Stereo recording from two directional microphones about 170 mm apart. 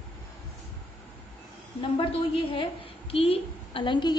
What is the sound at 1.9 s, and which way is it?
A woman's voice, 35° left (ahead or behind).